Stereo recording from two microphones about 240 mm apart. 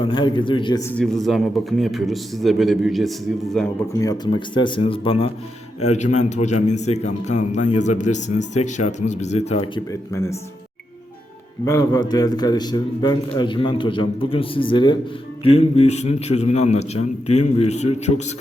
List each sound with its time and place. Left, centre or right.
0.0 s a man's voice: left; by 3.7 s centre
3.9 s speech: centre
11.6 s a man's voice: centre